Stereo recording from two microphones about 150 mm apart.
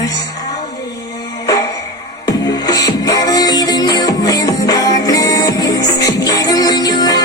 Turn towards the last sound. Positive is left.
turn(degrees=25)  # may be behind; listen again after turning